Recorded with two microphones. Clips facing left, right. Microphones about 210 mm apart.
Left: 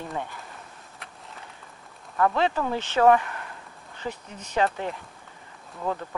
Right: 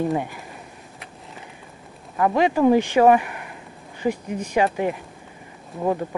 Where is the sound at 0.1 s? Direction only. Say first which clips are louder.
Right 8 dB; 15° right (ahead or behind).